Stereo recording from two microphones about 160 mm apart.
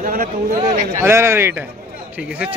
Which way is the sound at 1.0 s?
15° right (ahead or behind).